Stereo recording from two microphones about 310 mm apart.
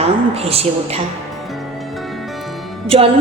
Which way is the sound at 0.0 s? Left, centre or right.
Centre.